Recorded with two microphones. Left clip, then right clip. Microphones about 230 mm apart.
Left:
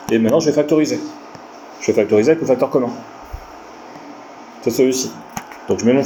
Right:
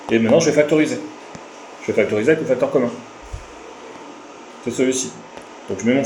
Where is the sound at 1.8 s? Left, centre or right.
Left.